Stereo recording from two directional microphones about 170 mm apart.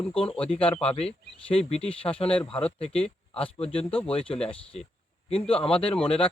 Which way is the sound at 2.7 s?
35° left (ahead or behind).